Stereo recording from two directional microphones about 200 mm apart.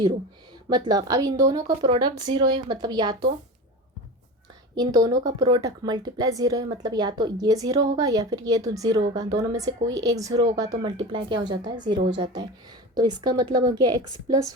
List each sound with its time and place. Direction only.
0.7 s a woman's voice: 20° right (ahead or behind)
4.7 s a woman's voice: 20° right (ahead or behind)